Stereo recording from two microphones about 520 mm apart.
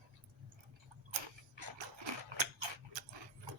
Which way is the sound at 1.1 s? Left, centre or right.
Right.